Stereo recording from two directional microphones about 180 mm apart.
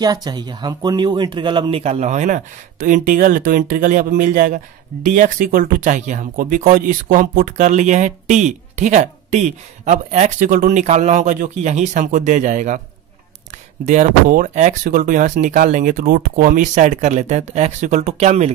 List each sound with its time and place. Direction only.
0.0 s speech: 20° right (ahead or behind); by 12.8 s 45° right (ahead or behind)
13.8 s speech: 45° right (ahead or behind)